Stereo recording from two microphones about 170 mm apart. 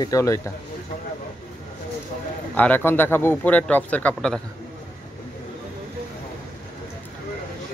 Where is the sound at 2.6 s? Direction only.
10° left (ahead or behind).